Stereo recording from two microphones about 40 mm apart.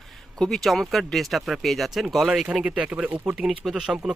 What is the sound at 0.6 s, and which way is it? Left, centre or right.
Speech, centre.